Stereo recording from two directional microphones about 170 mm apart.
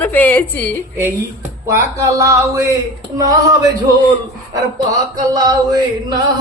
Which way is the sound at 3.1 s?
20° right (ahead or behind).